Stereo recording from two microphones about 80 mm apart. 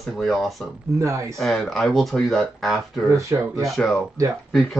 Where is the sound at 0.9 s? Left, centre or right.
Right.